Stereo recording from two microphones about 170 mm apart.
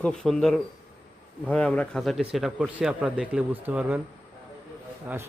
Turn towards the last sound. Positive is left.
turn(degrees=-15)  # may be behind; listen again after turning